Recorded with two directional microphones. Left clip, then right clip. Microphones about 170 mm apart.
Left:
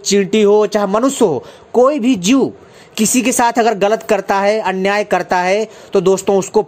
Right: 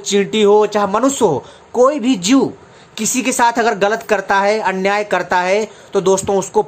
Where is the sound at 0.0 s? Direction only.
35° left (ahead or behind).